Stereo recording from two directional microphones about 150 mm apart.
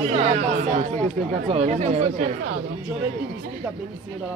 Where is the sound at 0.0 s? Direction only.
45° right (ahead or behind).